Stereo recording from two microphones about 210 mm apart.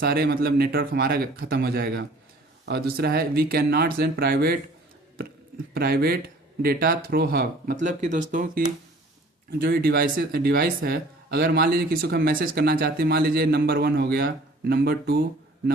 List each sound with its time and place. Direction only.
0.0 s speech: 45° right (ahead or behind)
5.7 s speech: 45° right (ahead or behind)